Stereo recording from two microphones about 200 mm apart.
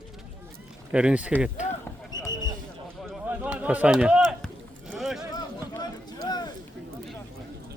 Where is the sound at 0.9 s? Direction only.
5° right (ahead or behind).